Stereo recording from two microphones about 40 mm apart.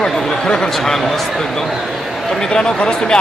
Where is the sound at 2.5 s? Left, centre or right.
Centre.